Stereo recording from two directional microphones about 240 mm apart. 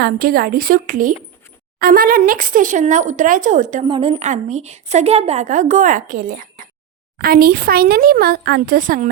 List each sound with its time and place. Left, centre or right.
0.0 s speech: right
3.8 s a woman's voice: centre